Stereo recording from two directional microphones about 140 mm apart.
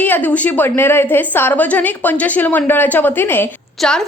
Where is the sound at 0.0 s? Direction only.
10° left (ahead or behind).